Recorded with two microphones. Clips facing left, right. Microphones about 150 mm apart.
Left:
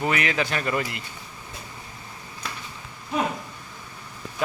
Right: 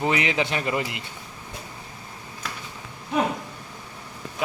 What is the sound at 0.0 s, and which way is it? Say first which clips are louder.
Speech: right 1 dB; 20° right (ahead or behind).